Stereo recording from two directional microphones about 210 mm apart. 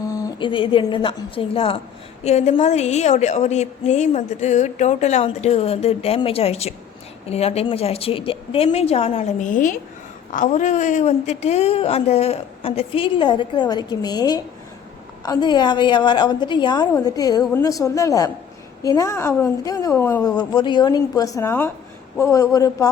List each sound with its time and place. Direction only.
0.1 s a woman's voice: 15° left (ahead or behind)